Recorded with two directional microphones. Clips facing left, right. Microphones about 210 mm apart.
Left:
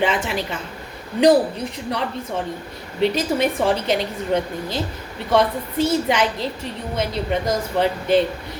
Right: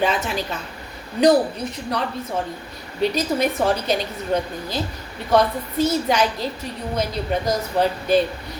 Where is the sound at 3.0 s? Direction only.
25° left (ahead or behind).